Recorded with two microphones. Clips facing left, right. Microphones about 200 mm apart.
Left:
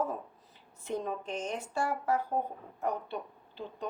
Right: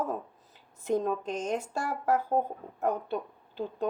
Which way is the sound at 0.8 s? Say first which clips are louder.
Right 7 dB; 40° right (ahead or behind).